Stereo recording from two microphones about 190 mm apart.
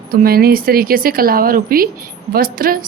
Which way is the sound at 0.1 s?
50° right (ahead or behind).